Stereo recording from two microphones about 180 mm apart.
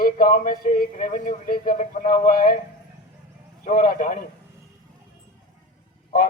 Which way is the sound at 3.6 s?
50° left (ahead or behind).